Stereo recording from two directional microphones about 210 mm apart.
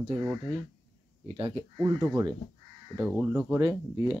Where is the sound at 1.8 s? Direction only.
15° right (ahead or behind).